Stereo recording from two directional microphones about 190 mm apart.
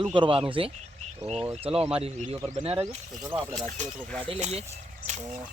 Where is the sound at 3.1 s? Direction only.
10° right (ahead or behind).